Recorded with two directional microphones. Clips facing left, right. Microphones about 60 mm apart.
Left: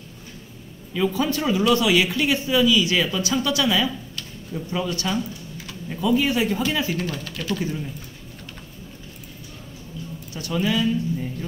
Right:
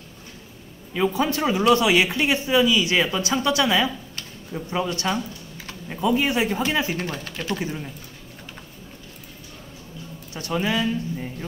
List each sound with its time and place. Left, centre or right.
0.9 s a man's voice: right
10.3 s a man's voice: right